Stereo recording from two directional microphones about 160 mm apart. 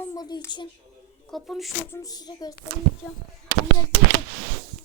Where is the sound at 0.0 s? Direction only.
20° left (ahead or behind).